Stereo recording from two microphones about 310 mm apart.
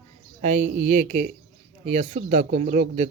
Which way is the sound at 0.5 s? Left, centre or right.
Right.